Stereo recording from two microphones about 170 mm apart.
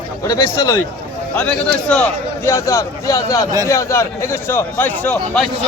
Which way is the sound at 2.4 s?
15° left (ahead or behind).